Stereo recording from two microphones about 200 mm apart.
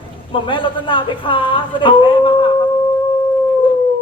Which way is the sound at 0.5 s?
25° left (ahead or behind).